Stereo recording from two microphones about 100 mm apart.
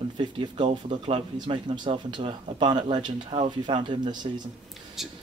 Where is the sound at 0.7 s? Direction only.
65° right (ahead or behind); by 4.3 s 50° right (ahead or behind).